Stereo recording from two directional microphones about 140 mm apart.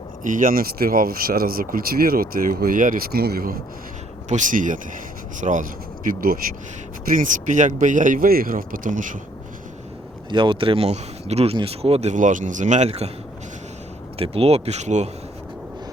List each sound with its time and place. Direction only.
0.3 s speech: 75° right (ahead or behind); by 3.6 s 90° right
4.3 s speech: 65° right (ahead or behind); by 6.4 s 85° right
7.1 s speech: 70° right (ahead or behind)
10.2 s speech: 35° right (ahead or behind); by 13.1 s 50° right (ahead or behind)
14.2 s speech: 45° right (ahead or behind)